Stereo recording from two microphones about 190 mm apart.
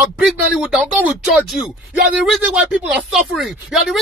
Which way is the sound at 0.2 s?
5° right (ahead or behind).